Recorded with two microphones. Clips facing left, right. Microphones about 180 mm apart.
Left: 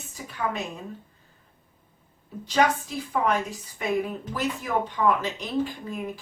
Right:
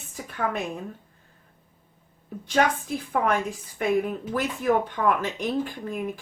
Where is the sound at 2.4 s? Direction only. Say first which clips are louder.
Even; 55° right (ahead or behind).